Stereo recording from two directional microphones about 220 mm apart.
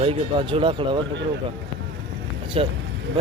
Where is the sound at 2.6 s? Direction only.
25° right (ahead or behind).